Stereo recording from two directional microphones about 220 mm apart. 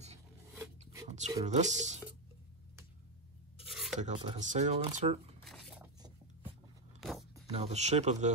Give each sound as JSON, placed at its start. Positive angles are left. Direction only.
{"t": 1.0, "sound": "a sound", "side_deg": -30}
{"t": 1.4, "sound": "speech", "side_deg": -30}
{"t": 3.5, "sound": "filing", "side_deg": 0}
{"t": 3.9, "sound": "speech", "side_deg": -30}
{"t": 5.4, "sound": "dishes", "side_deg": 0}
{"t": 7.0, "sound": "zipper", "side_deg": 0}
{"t": 7.5, "sound": "speech", "side_deg": -30}